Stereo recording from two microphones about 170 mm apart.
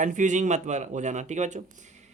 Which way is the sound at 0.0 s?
45° right (ahead or behind).